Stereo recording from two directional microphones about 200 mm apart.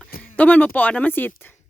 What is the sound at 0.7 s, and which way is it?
Speech, 10° left (ahead or behind).